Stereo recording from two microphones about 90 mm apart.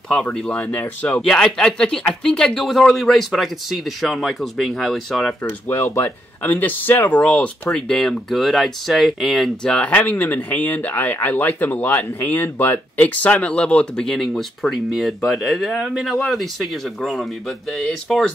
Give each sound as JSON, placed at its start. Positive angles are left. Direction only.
{"t": 0.1, "sound": "speech", "side_deg": 10}
{"t": 1.2, "sound": "speech", "side_deg": 5}
{"t": 5.4, "sound": "speech", "side_deg": 25}
{"t": 7.7, "sound": "speech", "side_deg": 5}
{"t": 9.7, "sound": "speech", "side_deg": 15}